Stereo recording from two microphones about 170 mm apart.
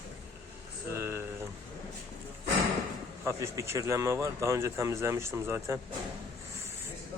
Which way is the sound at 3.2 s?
15° right (ahead or behind).